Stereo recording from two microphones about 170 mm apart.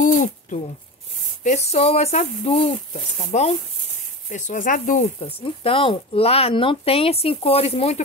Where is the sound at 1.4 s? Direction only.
40° left (ahead or behind).